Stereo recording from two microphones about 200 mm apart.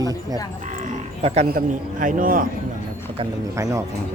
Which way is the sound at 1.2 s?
30° right (ahead or behind).